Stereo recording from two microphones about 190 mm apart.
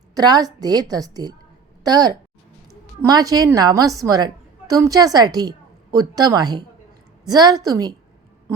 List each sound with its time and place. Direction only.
0.1 s a woman's voice: 20° right (ahead or behind)